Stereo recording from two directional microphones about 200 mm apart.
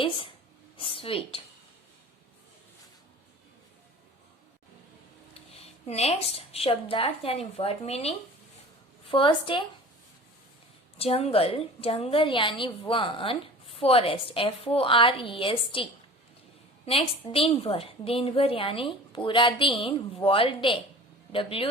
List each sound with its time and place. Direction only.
0.8 s a woman's voice: 25° left (ahead or behind)
5.3 s a woman's voice: 30° left (ahead or behind)
10.9 s a woman's voice: 30° left (ahead or behind)